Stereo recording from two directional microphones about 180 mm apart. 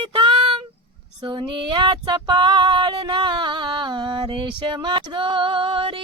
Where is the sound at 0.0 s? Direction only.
30° right (ahead or behind).